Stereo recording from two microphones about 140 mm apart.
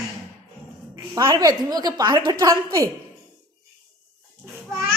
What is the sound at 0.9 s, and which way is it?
A woman's voice, 25° right (ahead or behind).